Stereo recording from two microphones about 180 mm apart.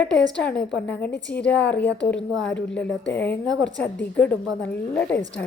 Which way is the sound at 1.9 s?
70° left (ahead or behind).